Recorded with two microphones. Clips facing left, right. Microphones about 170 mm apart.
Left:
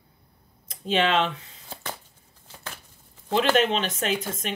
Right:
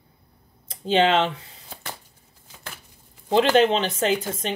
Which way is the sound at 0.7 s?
30° right (ahead or behind).